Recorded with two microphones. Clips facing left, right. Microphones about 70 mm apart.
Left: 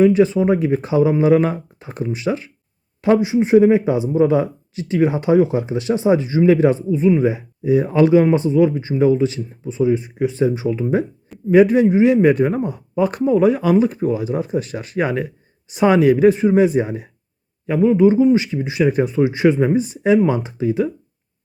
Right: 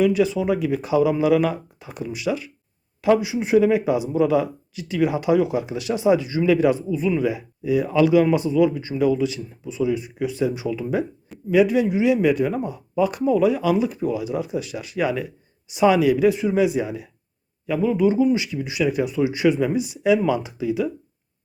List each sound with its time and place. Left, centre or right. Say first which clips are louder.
0.0 s speech: left 5 dB; left